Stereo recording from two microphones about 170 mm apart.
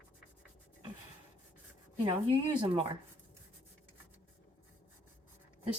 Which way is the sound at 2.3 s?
30° right (ahead or behind).